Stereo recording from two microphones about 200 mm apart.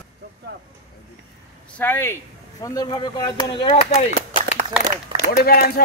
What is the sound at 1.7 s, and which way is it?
A man's voice, 10° left (ahead or behind).